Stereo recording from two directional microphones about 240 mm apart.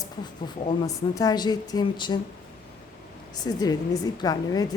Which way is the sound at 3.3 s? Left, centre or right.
Centre.